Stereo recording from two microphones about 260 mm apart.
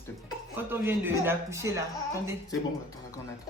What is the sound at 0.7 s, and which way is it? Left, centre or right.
A man's voice, centre.